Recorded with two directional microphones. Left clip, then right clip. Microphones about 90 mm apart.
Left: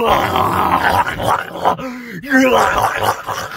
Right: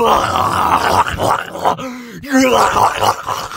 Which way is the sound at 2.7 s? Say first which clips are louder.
Right 3 dB; 60° right (ahead or behind).